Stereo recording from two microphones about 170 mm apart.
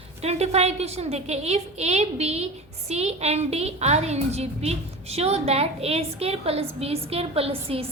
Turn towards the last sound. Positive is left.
turn(degrees=-35)  # may be behind; listen again after turning